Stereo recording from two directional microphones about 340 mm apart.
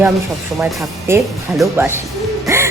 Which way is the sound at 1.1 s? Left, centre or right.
Centre.